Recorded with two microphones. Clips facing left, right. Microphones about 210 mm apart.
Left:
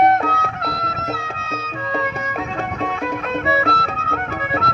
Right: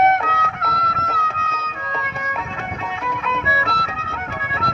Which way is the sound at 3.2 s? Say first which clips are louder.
Left 6 dB; 45° left (ahead or behind).